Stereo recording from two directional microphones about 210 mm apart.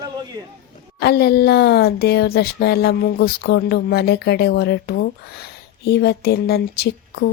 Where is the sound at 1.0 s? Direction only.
50° left (ahead or behind).